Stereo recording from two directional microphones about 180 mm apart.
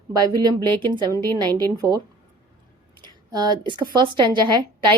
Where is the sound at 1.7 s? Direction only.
20° right (ahead or behind).